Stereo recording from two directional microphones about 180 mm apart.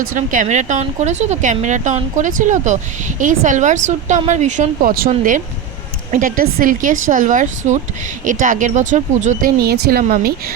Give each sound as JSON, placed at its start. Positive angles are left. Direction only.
{"t": 0.1, "sound": "speech", "side_deg": -45}
{"t": 9.6, "sound": "speech", "side_deg": -60}